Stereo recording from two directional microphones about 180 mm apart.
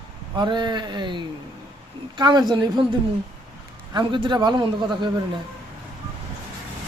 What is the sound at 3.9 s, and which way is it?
Speech, 25° right (ahead or behind).